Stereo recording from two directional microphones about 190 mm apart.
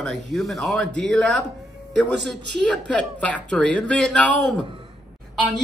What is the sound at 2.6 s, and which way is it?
A man's voice, 5° left (ahead or behind).